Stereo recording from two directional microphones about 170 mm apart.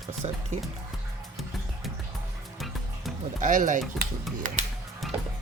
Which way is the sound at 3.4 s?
50° right (ahead or behind).